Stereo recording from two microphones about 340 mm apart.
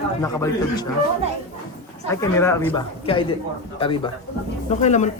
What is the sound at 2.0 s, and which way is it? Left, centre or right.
A woman's voice, centre.